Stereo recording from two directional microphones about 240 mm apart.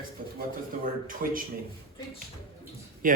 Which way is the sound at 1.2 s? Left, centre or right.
Right.